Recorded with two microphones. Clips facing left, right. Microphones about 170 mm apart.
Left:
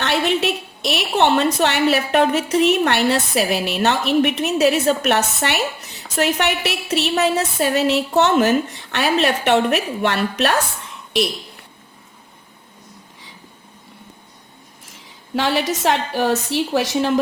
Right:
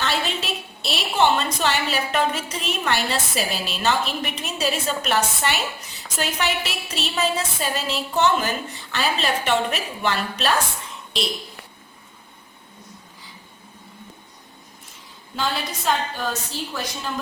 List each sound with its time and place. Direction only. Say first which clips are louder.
0.0 s a sound: left 7 dB; 70° left (ahead or behind)
1.5 s a woman's voice: left 6 dB; 65° left (ahead or behind)
14.9 s a woman's voice: left 7 dB; 85° left